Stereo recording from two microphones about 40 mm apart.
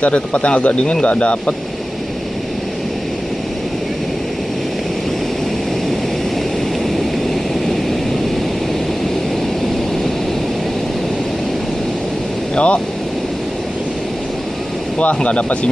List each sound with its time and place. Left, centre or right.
0.0 s speech: left
12.5 s speech: left
15.0 s speech: left